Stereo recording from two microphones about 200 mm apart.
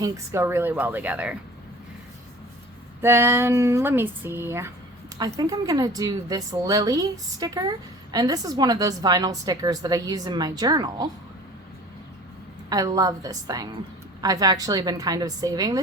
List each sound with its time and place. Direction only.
0.0 s speech: 15° right (ahead or behind)
3.0 s a woman's voice: 10° right (ahead or behind)
12.7 s a woman's voice: 20° right (ahead or behind)